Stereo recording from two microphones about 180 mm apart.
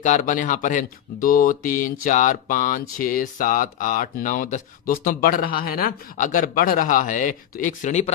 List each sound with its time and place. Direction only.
0.0 s speech: 45° left (ahead or behind)